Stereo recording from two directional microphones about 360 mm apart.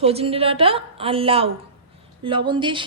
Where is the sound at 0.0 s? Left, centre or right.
Centre.